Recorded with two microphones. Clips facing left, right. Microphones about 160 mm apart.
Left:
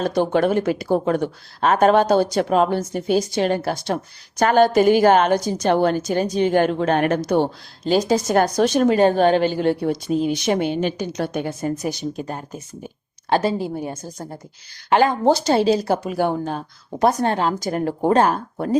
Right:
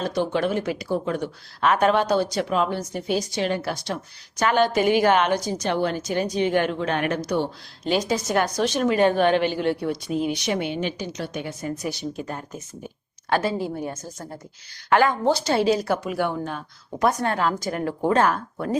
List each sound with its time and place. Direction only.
0.0 s a woman's voice: 50° left (ahead or behind)
1.6 s a woman's voice: 40° left (ahead or behind)
10.3 s a woman's voice: 50° left (ahead or behind)
12.1 s a woman's voice: 35° left (ahead or behind)
15.3 s a woman's voice: 40° left (ahead or behind)